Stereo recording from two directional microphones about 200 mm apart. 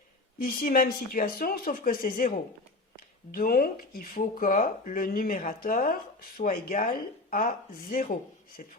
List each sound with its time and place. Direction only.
0.3 s speech: 45° left (ahead or behind)